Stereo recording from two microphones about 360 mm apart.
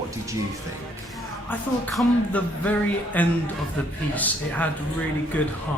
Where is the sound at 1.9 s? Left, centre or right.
Centre.